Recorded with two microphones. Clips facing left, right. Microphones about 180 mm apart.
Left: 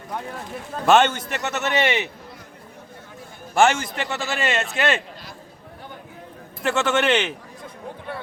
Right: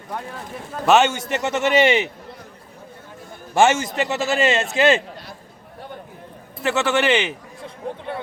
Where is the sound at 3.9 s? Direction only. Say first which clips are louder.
Right 6 dB; 20° right (ahead or behind).